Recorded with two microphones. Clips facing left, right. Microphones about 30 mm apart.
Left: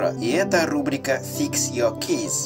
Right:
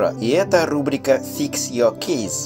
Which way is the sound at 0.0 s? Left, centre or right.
Centre.